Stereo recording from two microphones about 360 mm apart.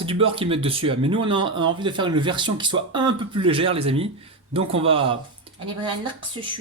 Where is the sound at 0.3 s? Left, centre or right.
Centre.